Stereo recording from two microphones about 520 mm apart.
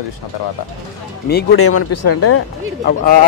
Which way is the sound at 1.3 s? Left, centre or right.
Left.